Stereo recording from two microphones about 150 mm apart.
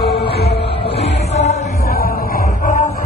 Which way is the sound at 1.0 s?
50° left (ahead or behind).